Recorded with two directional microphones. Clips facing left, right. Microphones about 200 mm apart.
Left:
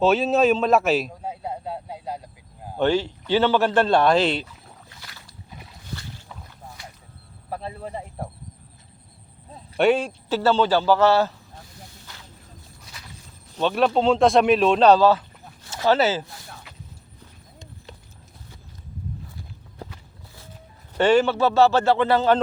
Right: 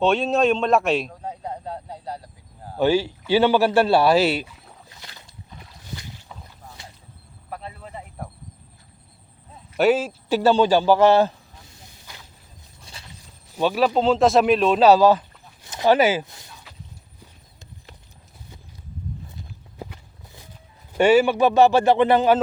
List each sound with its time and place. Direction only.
0.0 s a man's voice: 5° left (ahead or behind)
2.7 s speech: 10° right (ahead or behind)
4.9 s rowboat: 20° right (ahead or behind)
7.5 s a sound: 30° left (ahead or behind)
7.9 s speech: 30° left (ahead or behind)
9.7 s a man's voice: centre (ahead or behind)
10.2 s speech: 15° right (ahead or behind)
12.8 s a sound: 30° right (ahead or behind)
13.6 s a man's voice: 5° right (ahead or behind)
19.8 s walk: 15° right (ahead or behind)
20.9 s speech: 10° right (ahead or behind)